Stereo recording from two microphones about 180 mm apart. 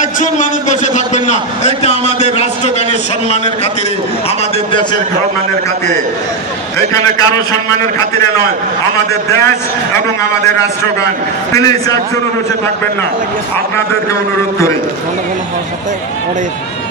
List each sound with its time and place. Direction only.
0.0 s a man's voice: 45° left (ahead or behind)
11.5 s a man's voice: 20° left (ahead or behind)